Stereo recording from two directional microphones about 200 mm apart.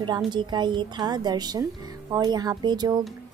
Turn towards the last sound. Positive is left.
turn(degrees=-20)  # may be behind; listen again after turning